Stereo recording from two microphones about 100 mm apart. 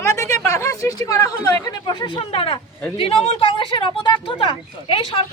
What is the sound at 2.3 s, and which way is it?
A woman's voice, 65° left (ahead or behind).